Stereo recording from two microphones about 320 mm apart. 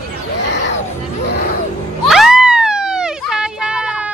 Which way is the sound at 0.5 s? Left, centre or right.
Left.